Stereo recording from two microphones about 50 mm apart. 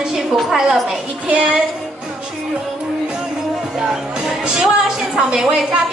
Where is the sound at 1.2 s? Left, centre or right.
Right.